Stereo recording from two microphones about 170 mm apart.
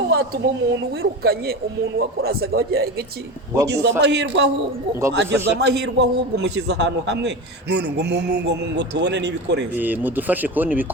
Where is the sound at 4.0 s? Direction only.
90° right.